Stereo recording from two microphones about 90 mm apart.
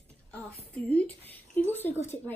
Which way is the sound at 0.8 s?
20° left (ahead or behind).